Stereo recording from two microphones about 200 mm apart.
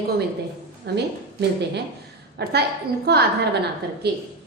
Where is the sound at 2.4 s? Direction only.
55° right (ahead or behind).